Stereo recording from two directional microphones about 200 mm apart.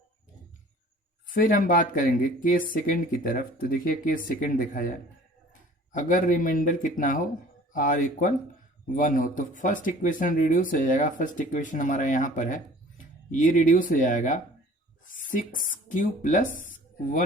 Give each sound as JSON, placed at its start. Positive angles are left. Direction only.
{"t": 1.3, "sound": "speech", "side_deg": 40}